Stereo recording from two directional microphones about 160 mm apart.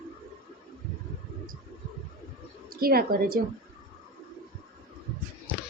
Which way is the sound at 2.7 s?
70° right (ahead or behind).